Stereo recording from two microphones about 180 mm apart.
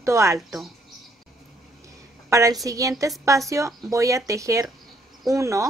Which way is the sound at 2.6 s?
20° right (ahead or behind).